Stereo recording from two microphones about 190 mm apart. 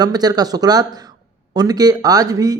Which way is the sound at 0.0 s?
20° right (ahead or behind).